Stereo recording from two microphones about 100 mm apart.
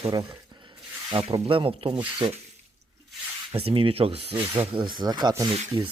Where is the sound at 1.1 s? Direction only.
55° right (ahead or behind).